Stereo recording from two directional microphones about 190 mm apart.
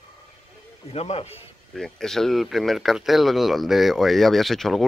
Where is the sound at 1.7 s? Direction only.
Centre (ahead or behind).